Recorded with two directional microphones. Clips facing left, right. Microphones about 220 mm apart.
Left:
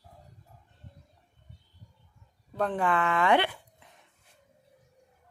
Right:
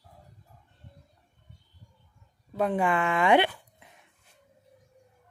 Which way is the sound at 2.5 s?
10° right (ahead or behind).